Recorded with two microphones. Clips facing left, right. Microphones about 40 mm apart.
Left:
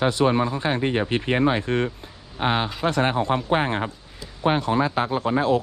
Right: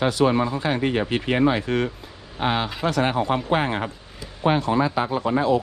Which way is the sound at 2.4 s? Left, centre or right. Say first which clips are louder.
Even; left.